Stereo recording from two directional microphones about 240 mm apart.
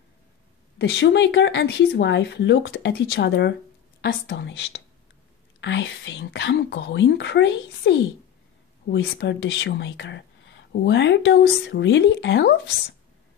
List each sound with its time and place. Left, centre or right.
0.7 s speech: left